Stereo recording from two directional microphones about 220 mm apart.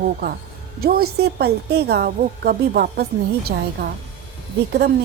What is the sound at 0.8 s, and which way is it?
A woman's voice, 45° right (ahead or behind).